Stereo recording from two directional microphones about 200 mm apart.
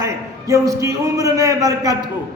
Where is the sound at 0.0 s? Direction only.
15° right (ahead or behind).